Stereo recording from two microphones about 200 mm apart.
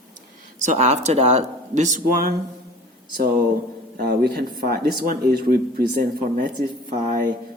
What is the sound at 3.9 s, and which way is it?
Speech, 50° right (ahead or behind).